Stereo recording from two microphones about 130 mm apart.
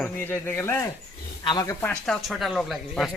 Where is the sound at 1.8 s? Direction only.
5° left (ahead or behind).